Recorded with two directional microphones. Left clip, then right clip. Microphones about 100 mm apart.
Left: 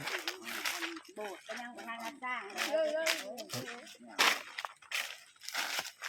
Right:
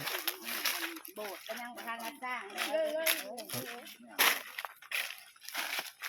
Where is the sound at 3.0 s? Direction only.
30° right (ahead or behind).